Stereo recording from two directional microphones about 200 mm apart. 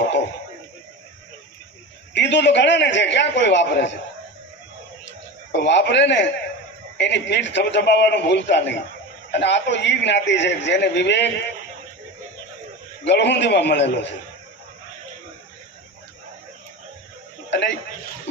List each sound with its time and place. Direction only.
2.1 s a man's voice: 60° left (ahead or behind)
5.0 s a man's voice: 60° left (ahead or behind)
13.1 s a man's voice: 60° left (ahead or behind)
17.5 s a sound: 60° left (ahead or behind)